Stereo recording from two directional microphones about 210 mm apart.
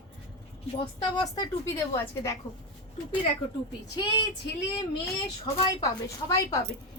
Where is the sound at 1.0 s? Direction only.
20° left (ahead or behind).